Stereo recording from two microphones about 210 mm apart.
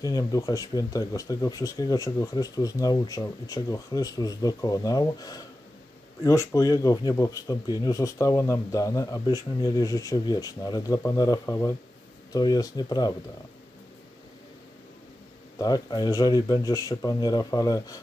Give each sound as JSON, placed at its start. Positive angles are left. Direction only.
{"t": 0.0, "sound": "speech", "side_deg": 15}
{"t": 15.6, "sound": "speech", "side_deg": 20}